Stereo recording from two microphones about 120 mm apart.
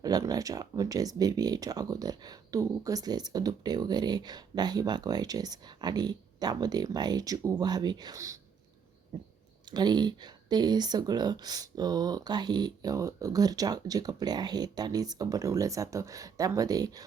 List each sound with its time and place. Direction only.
0.0 s speech: 30° right (ahead or behind)
9.6 s speech: 35° right (ahead or behind)